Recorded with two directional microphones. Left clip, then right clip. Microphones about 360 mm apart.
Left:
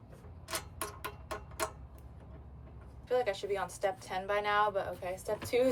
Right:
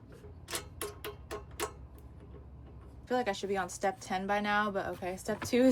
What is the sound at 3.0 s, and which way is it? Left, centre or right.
A woman's voice, right.